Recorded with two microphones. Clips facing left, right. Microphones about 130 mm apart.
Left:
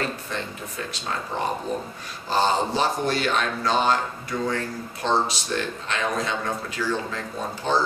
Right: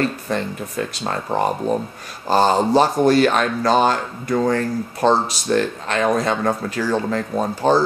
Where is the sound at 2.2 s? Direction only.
45° right (ahead or behind).